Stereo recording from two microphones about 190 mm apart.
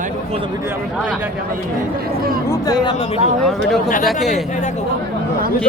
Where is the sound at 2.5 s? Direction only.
20° left (ahead or behind).